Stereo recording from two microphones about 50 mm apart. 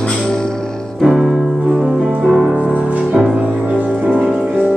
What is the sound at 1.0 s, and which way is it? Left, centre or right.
Music, centre.